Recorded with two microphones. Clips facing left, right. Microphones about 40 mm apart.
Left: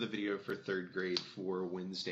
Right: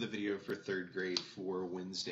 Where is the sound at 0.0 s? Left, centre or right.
Centre.